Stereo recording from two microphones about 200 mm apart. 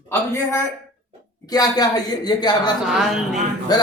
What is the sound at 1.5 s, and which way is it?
A man's voice, 20° left (ahead or behind).